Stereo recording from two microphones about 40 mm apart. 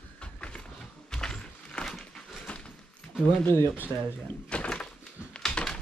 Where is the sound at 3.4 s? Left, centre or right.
Left.